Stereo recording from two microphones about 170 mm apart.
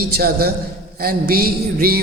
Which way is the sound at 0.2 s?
60° right (ahead or behind).